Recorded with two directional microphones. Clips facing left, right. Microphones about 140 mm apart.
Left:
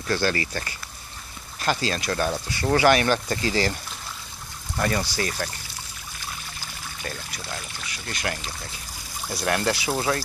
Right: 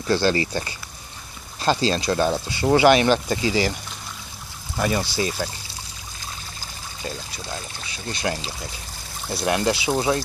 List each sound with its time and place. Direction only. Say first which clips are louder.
0.1 s speech: right 4 dB; 25° right (ahead or behind)
4.7 s speech: right 2 dB; 15° right (ahead or behind)
7.0 s speech: right 4 dB; 20° right (ahead or behind)